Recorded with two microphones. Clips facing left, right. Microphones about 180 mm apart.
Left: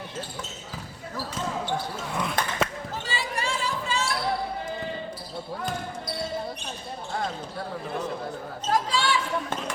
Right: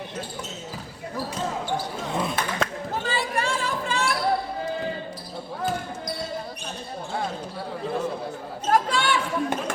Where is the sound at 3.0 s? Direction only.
55° right (ahead or behind).